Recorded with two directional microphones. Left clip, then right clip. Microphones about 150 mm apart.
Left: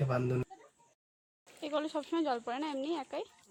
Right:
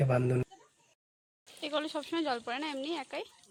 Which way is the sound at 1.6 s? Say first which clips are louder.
Right 1 dB; 5° left (ahead or behind).